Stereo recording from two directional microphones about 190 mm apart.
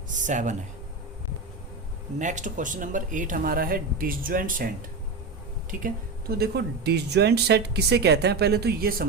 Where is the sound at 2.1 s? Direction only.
40° right (ahead or behind).